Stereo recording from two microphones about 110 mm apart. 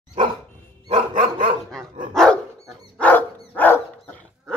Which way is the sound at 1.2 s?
60° right (ahead or behind).